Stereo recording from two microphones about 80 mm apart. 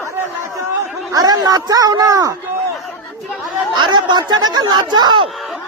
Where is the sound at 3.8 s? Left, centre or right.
Right.